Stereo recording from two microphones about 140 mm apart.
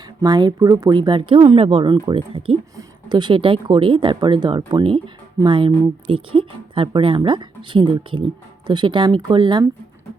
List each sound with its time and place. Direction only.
0.2 s speech: 30° right (ahead or behind)
0.9 s speech: 35° right (ahead or behind)